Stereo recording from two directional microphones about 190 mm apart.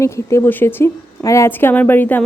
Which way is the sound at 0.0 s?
15° left (ahead or behind).